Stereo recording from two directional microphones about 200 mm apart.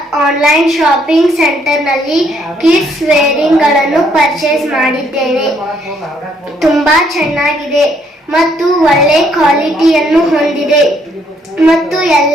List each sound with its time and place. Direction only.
0.3 s a woman's voice: centre (ahead or behind)
6.6 s a woman's voice: centre (ahead or behind)